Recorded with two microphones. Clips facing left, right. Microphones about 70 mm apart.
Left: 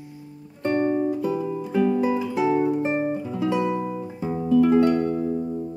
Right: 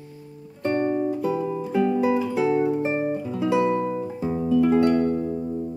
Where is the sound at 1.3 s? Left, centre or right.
Centre.